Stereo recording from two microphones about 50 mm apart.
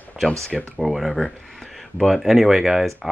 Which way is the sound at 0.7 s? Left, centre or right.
Centre.